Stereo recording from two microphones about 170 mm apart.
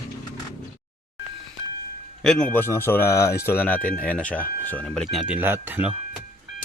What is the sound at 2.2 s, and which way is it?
Speech, 5° left (ahead or behind).